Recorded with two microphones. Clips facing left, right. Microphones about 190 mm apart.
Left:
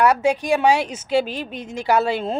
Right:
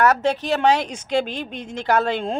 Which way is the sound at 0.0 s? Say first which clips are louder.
Left 1 dB; 10° left (ahead or behind).